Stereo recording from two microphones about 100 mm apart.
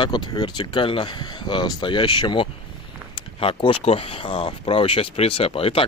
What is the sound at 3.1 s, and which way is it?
Speech, 60° left (ahead or behind).